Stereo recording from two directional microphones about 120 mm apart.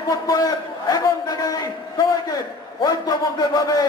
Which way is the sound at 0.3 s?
30° left (ahead or behind).